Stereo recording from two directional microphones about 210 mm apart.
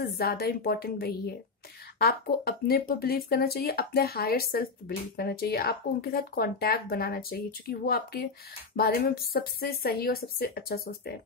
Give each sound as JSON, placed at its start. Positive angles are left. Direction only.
{"t": 0.0, "sound": "speech", "side_deg": 45}